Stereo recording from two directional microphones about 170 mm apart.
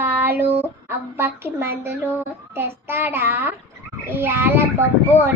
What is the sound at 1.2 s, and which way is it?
Speech, 15° right (ahead or behind).